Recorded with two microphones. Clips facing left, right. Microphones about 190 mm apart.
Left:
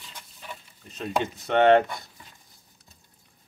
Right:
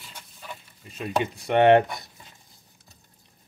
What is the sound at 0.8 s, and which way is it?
Speech, 10° right (ahead or behind).